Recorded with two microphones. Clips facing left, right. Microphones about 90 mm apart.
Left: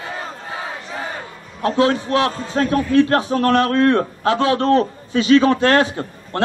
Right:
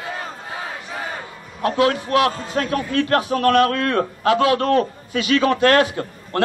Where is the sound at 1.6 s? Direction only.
30° left (ahead or behind).